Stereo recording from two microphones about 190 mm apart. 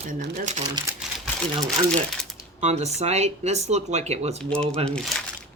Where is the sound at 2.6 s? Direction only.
35° right (ahead or behind).